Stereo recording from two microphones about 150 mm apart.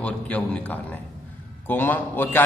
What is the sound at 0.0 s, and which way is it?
A man's voice, 10° left (ahead or behind).